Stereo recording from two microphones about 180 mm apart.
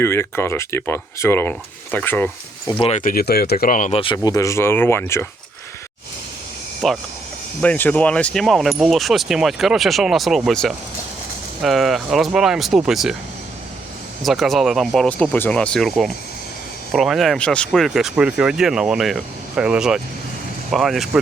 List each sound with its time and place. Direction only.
0.0 s speech: 15° left (ahead or behind)
3.0 s speech: 55° left (ahead or behind)
4.0 s speech: 25° left (ahead or behind)
6.8 s speech: centre (ahead or behind)
14.2 s speech: centre (ahead or behind)